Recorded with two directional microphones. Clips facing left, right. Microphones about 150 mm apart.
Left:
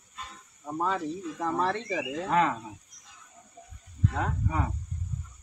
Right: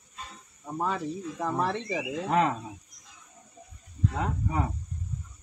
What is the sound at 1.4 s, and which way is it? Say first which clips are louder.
Speech: even; 10° right (ahead or behind).